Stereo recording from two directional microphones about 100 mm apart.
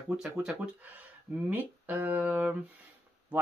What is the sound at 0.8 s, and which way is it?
Speech, 15° right (ahead or behind).